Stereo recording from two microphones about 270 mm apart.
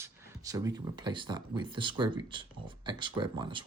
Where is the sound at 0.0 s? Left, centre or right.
Centre.